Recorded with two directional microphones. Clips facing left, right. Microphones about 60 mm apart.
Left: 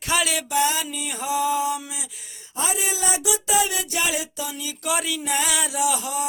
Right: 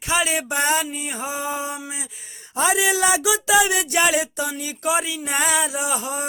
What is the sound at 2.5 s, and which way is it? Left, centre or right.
Speech, right.